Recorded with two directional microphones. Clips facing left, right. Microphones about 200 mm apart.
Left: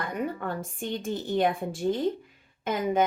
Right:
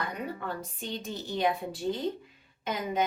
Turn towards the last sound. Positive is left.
turn(degrees=50)  # may be behind; listen again after turning